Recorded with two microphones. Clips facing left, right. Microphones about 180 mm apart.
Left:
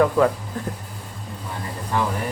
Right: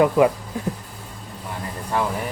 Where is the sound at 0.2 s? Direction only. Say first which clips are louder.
Right 2 dB; 15° right (ahead or behind).